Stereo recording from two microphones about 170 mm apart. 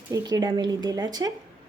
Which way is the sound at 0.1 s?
25° right (ahead or behind).